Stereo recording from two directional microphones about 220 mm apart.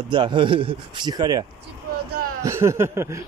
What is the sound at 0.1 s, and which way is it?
Speech, 20° right (ahead or behind).